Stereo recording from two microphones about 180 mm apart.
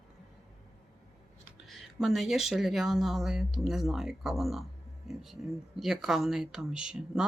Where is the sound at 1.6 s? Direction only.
Centre (ahead or behind).